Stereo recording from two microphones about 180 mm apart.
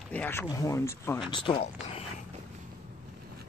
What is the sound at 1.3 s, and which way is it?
Speech, 25° left (ahead or behind).